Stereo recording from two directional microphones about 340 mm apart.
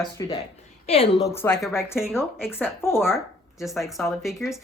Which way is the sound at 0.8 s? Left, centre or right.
Centre.